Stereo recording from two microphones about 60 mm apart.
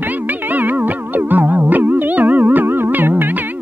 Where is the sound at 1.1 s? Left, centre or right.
Right.